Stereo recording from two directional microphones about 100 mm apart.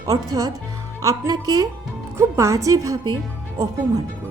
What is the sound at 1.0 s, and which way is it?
A woman's voice, 35° right (ahead or behind).